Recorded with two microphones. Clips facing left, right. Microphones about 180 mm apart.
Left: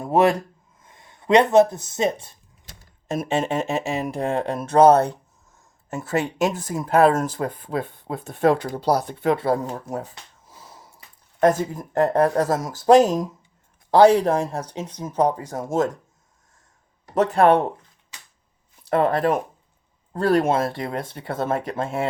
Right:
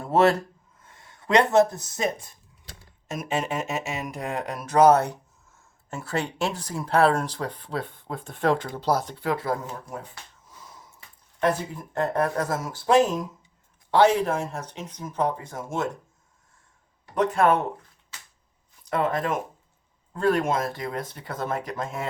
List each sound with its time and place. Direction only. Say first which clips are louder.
0.0 s speech: left 2 dB; 15° left (ahead or behind)
6.6 s speech: left 3 dB; 45° left (ahead or behind)
8.3 s speech: left 5 dB; 20° left (ahead or behind); by 15.9 s 40° left (ahead or behind)
17.2 s speech: left 5 dB; 35° left (ahead or behind)
19.0 s speech: left 5 dB; 35° left (ahead or behind)